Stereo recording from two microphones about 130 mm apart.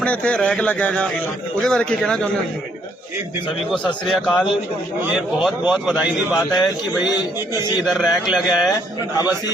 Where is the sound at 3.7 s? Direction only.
5° left (ahead or behind).